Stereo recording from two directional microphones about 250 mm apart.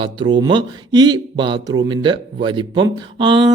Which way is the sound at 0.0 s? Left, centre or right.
Centre.